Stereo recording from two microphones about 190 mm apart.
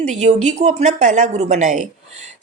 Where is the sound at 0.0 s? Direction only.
35° right (ahead or behind).